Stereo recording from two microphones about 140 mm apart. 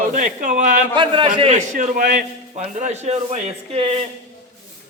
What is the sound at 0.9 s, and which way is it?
Speech, 35° right (ahead or behind).